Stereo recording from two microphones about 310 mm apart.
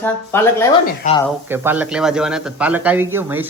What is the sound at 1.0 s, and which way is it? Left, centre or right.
Speech, left.